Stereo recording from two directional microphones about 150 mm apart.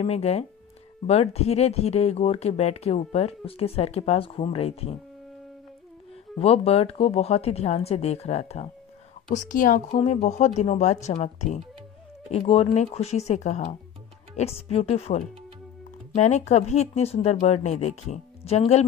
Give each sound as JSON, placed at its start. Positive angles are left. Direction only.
{"t": 0.0, "sound": "speech", "side_deg": 45}
{"t": 6.3, "sound": "speech", "side_deg": 45}
{"t": 9.3, "sound": "speech", "side_deg": 60}